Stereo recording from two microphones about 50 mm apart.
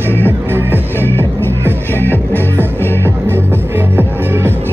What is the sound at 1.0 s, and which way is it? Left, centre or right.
Music, left.